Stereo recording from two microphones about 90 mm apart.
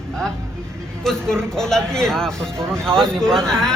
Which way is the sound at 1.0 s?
5° left (ahead or behind).